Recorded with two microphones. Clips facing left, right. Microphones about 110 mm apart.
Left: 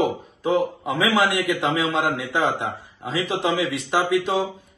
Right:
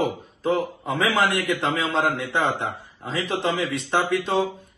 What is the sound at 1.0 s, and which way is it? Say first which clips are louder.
Speech: left 1 dB; 15° left (ahead or behind).